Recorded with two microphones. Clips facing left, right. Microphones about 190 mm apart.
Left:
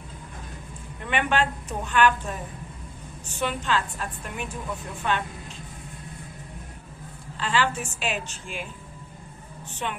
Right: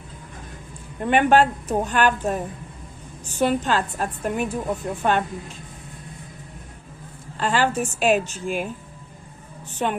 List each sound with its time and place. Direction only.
1.0 s a woman's voice: 40° right (ahead or behind)
3.3 s a woman's voice: 40° right (ahead or behind)
7.3 s a woman's voice: 45° right (ahead or behind)
9.8 s a woman's voice: 40° right (ahead or behind)